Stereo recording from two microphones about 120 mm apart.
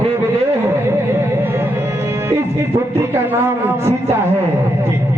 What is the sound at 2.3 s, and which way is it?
Speech, 20° right (ahead or behind).